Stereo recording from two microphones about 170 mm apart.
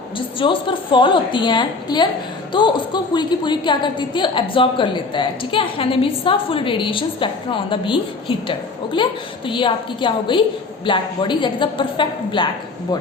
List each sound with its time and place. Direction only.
0.3 s a woman's voice: 30° left (ahead or behind)